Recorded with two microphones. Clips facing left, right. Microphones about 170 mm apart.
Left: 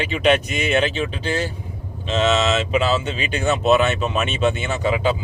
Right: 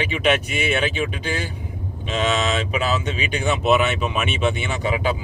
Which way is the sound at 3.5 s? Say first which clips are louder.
Left 2 dB; 10° right (ahead or behind).